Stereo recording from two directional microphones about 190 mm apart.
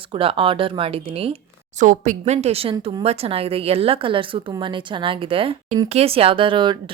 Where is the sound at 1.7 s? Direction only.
40° right (ahead or behind).